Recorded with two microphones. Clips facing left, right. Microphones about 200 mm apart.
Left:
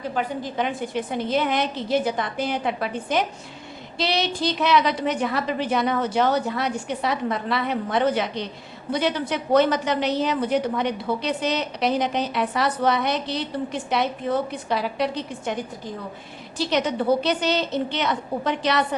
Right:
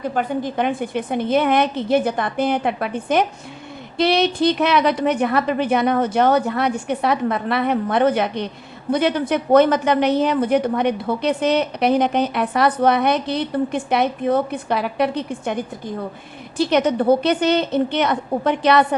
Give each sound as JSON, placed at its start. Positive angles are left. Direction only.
{"t": 0.1, "sound": "a woman's voice", "side_deg": -50}
{"t": 16.6, "sound": "a woman's voice", "side_deg": -55}